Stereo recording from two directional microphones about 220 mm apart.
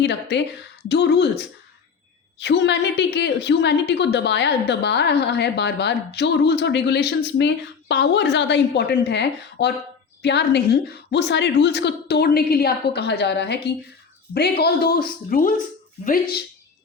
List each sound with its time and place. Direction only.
0.0 s a woman's voice: 50° left (ahead or behind)